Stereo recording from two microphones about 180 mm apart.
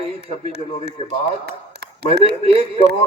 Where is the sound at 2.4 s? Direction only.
30° right (ahead or behind).